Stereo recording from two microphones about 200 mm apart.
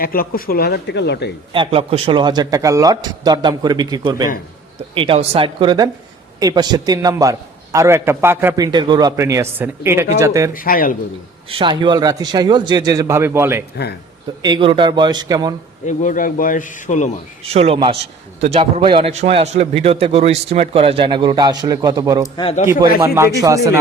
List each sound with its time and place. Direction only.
0.0 s speech: 45° left (ahead or behind)
1.5 s a man's voice: 30° right (ahead or behind)
10.5 s speech: 45° left (ahead or behind)
11.4 s a man's voice: 25° right (ahead or behind)
14.4 s a man's voice: 25° right (ahead or behind)
15.9 s speech: 40° left (ahead or behind)
17.4 s a man's voice: 30° right (ahead or behind)
22.4 s a man's voice: 30° left (ahead or behind)
22.6 s a man's voice: 15° right (ahead or behind)